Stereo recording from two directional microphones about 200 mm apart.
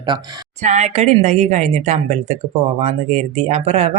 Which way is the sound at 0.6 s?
35° right (ahead or behind).